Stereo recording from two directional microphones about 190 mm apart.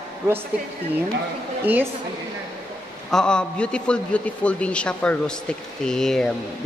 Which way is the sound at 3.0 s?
5° left (ahead or behind).